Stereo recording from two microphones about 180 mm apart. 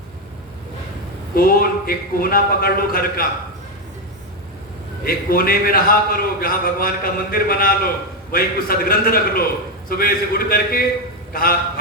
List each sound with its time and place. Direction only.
1.4 s a man's voice: 55° left (ahead or behind)
5.0 s a man's voice: 55° left (ahead or behind)
11.3 s a sound: 55° left (ahead or behind)